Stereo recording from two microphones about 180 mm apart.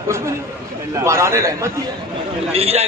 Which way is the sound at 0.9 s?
15° right (ahead or behind).